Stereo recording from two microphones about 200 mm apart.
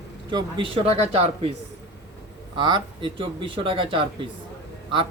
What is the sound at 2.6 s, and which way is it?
Speech, 25° right (ahead or behind).